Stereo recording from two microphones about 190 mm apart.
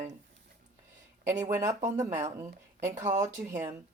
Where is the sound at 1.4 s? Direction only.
15° right (ahead or behind).